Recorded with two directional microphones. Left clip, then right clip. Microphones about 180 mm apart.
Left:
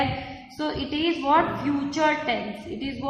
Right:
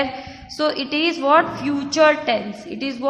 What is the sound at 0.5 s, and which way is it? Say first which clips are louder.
A woman's voice: right 8 dB; 50° right (ahead or behind).